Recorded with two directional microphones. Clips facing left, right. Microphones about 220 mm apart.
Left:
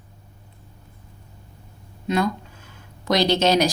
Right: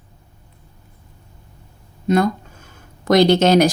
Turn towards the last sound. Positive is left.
turn(degrees=-50)  # may be behind; listen again after turning